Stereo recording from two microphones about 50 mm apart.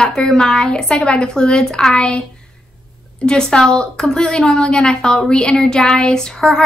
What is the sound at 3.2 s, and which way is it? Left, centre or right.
A woman's voice, centre.